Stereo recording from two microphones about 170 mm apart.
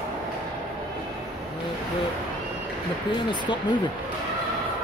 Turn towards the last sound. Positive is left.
turn(degrees=25)  # may be behind; listen again after turning